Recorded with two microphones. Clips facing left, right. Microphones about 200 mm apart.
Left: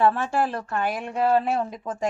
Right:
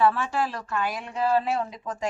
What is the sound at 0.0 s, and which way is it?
A woman's voice, 50° left (ahead or behind).